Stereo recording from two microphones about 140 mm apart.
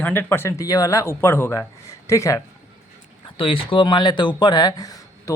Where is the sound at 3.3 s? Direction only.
40° left (ahead or behind).